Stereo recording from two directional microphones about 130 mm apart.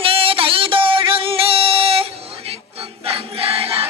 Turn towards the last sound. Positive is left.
turn(degrees=-45)  # may be behind; listen again after turning